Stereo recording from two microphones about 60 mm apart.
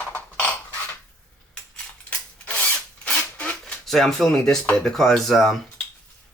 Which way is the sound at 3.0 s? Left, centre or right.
Left.